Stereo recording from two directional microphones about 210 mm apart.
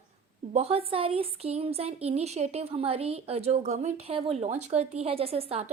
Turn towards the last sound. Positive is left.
turn(degrees=-30)  # may be behind; listen again after turning